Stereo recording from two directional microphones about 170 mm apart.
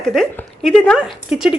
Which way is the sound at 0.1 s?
5° left (ahead or behind).